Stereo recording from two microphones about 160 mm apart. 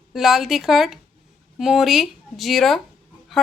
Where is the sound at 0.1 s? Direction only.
Centre (ahead or behind).